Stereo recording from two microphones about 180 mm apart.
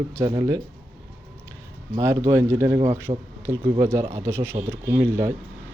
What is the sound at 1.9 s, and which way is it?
A man's voice, 20° right (ahead or behind).